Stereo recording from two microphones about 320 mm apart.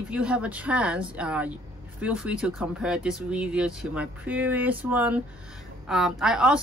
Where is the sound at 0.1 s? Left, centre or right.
Centre.